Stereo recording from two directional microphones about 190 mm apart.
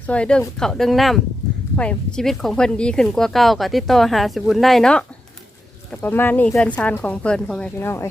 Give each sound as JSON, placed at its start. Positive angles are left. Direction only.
{"t": 0.1, "sound": "speech", "side_deg": 5}